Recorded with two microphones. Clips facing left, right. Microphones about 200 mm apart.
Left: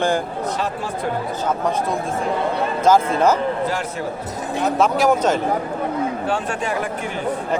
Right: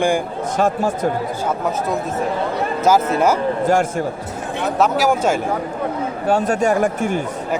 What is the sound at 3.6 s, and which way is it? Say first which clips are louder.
Speech: right 7 dB; 50° right (ahead or behind).